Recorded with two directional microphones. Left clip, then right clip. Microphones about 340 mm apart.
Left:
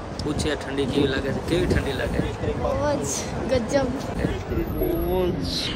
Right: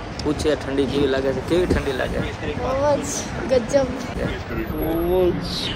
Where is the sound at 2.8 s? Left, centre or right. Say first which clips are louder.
Right 4 dB; centre.